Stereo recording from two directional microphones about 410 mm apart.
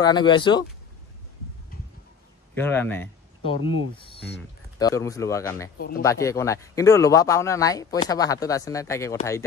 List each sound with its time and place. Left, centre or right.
0.0 s speech: centre
2.5 s speech: centre
5.8 s speech: left
6.0 s speech: centre